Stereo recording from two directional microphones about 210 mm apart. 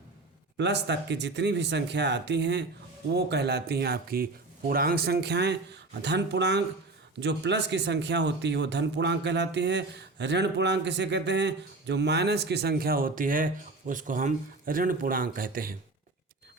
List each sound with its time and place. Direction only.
0.5 s speech: 55° right (ahead or behind)